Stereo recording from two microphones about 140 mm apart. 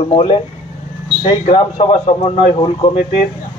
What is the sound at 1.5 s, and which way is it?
A man's voice, 45° left (ahead or behind).